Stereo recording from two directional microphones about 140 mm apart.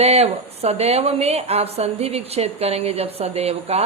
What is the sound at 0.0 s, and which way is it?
A woman's voice, 45° right (ahead or behind).